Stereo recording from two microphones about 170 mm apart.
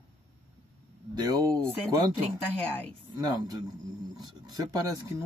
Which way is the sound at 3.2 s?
25° right (ahead or behind).